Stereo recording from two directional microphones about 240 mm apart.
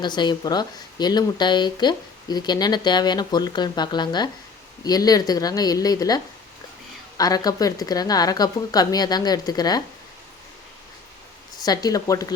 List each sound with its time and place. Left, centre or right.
0.0 s speech: centre
11.6 s speech: centre